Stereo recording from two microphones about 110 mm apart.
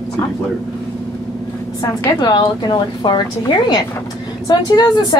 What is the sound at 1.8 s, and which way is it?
A woman's voice, 40° left (ahead or behind).